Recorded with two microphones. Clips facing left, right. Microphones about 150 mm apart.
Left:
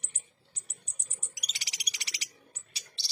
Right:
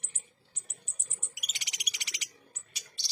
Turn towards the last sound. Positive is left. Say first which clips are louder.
# even
turn(degrees=30)  # may be behind; listen again after turning